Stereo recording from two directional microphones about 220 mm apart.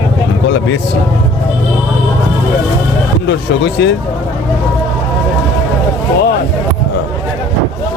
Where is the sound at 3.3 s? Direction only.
55° left (ahead or behind).